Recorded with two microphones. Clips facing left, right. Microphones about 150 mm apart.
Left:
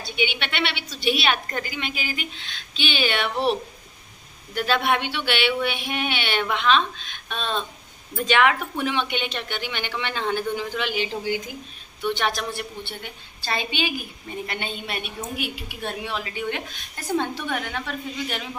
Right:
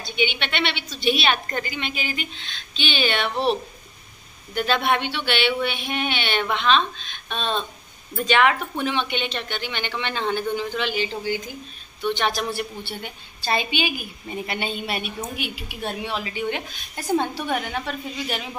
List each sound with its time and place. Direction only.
0.0 s a woman's voice: 10° left (ahead or behind)
4.6 s a woman's voice: 5° left (ahead or behind)
8.5 s a woman's voice: 10° left (ahead or behind)
13.0 s a woman's voice: 15° right (ahead or behind)
16.9 s speech: 15° right (ahead or behind)